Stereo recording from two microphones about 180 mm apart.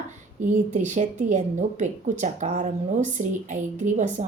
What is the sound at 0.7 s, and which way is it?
A woman's voice, 45° right (ahead or behind).